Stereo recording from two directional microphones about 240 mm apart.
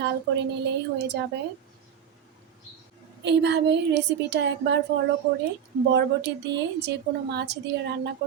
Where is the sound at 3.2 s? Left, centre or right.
Right.